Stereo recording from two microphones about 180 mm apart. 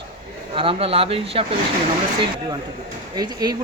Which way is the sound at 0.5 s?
30° right (ahead or behind).